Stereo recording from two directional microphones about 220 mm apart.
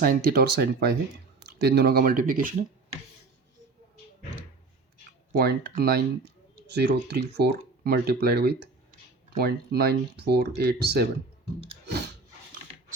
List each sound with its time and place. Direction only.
0.0 s speech: 40° right (ahead or behind)
5.4 s speech: 45° right (ahead or behind)